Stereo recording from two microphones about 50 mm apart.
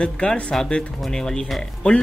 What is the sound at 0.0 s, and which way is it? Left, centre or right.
Speech, centre.